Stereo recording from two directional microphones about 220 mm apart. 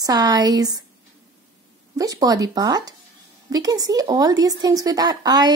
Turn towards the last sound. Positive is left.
turn(degrees=-20)  # may be behind; listen again after turning